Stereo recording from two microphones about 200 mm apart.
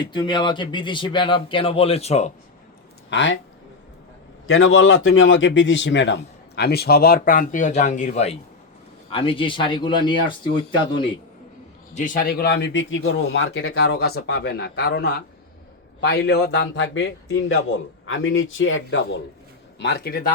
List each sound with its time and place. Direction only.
0.0 s speech: 20° left (ahead or behind)
3.1 s a man's voice: 65° left (ahead or behind)
4.4 s a man's voice: 90° left; by 11.0 s 25° left (ahead or behind)
11.9 s a man's voice: 40° left (ahead or behind); by 13.7 s 80° left
13.7 s a man's voice: 55° left (ahead or behind)
18.0 s a man's voice: 75° left (ahead or behind)
19.8 s a man's voice: 55° left (ahead or behind)